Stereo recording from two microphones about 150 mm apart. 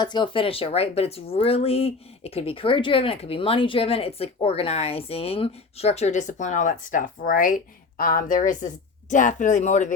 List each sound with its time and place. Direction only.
0.0 s speech: 30° left (ahead or behind); by 9.9 s 55° left (ahead or behind)